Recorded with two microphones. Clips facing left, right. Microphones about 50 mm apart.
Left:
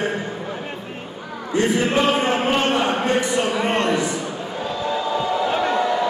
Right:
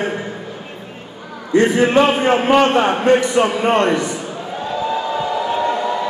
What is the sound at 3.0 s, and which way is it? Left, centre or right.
Speech, right.